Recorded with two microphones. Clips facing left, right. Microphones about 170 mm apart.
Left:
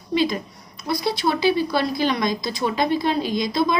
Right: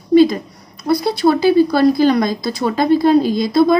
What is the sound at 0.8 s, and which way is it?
Speech, 50° right (ahead or behind).